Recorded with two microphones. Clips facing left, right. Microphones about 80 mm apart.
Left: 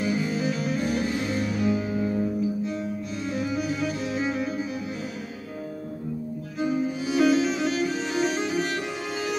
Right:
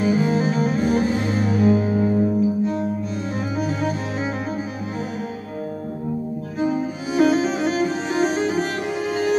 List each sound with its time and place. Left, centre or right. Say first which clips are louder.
0.0 s music: right 7 dB; right
6.6 s music: right 3 dB; right